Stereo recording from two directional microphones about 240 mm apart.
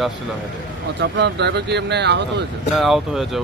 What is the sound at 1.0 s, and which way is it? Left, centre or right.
Speech, right.